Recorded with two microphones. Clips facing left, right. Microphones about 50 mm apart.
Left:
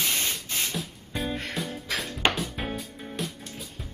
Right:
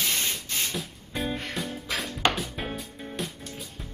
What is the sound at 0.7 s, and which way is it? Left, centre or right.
Music, centre.